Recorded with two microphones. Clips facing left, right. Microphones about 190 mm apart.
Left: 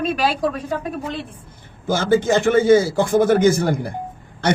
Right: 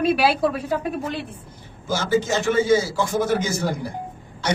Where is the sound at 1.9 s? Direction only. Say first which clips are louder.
Left 5 dB; 55° left (ahead or behind).